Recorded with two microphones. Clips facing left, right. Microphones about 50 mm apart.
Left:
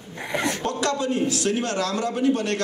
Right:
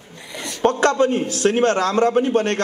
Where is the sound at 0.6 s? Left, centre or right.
Right.